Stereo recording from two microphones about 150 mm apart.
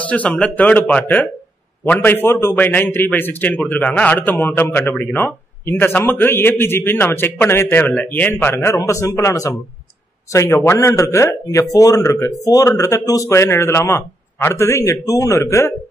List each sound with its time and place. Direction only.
0.0 s a man's voice: 10° left (ahead or behind)